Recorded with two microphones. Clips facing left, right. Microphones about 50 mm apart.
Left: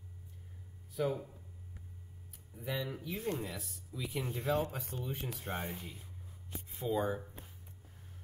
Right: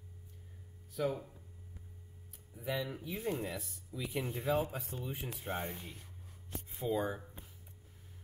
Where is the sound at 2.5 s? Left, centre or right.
Centre.